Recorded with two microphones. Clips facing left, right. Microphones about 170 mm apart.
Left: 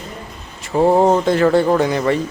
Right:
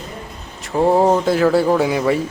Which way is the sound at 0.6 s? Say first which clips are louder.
Left 1 dB; centre (ahead or behind).